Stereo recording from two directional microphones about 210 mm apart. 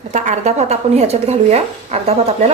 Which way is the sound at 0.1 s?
35° right (ahead or behind).